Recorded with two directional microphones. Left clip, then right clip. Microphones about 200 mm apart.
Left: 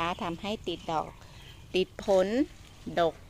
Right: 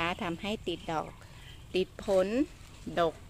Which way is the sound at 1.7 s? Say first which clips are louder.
Left 3 dB; 20° left (ahead or behind).